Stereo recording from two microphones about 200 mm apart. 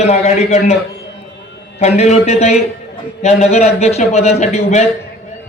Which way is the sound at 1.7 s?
35° left (ahead or behind).